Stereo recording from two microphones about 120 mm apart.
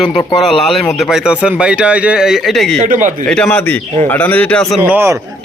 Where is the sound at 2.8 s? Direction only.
90° right.